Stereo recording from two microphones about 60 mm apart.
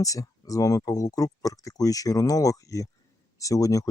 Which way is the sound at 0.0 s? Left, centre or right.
Left.